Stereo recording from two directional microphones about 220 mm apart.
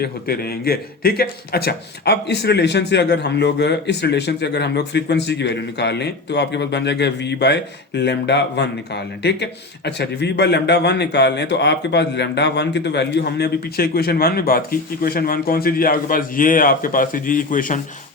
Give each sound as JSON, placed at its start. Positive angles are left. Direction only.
{"t": 0.0, "sound": "a man's voice", "side_deg": 45}